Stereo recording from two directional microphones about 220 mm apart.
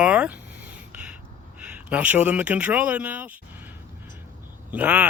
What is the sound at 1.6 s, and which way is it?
Speech, 5° right (ahead or behind).